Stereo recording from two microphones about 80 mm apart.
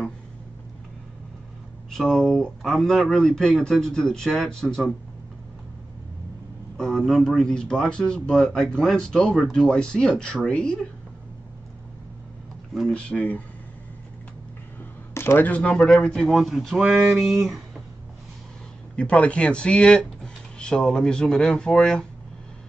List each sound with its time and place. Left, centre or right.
1.9 s speech: centre
6.8 s a man's voice: centre
12.9 s a man's voice: centre
15.1 s speech: left; by 17.6 s centre
18.9 s a man's voice: centre